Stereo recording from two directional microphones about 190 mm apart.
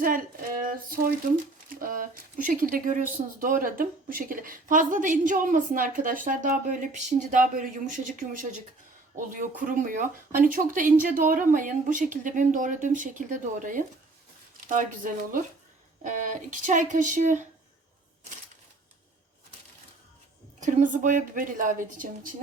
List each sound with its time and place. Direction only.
0.0 s a woman's voice: 45° right (ahead or behind)
20.6 s a woman's voice: 40° right (ahead or behind)